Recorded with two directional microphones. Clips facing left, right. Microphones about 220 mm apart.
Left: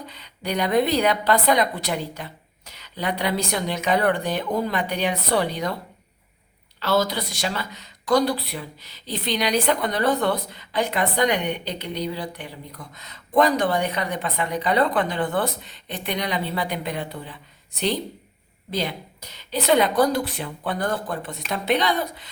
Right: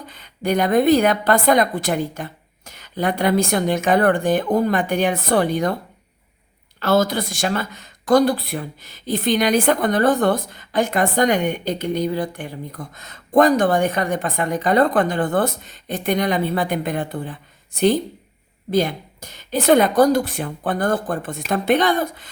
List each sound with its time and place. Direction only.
0.1 s speech: 50° right (ahead or behind)
6.7 s speech: 50° right (ahead or behind)